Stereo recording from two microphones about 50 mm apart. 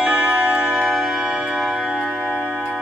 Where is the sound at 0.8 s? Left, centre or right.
Centre.